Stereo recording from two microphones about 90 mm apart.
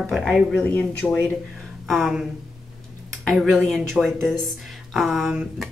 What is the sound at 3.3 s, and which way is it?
A woman's voice, centre (ahead or behind).